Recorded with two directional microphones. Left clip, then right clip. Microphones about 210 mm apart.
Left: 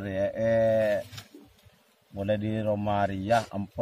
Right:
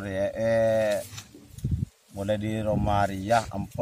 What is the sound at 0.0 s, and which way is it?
Livestock, 15° left (ahead or behind).